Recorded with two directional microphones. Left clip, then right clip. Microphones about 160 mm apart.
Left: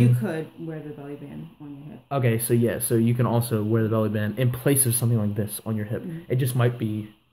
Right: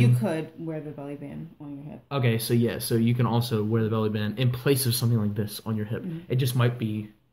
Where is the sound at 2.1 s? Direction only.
25° left (ahead or behind).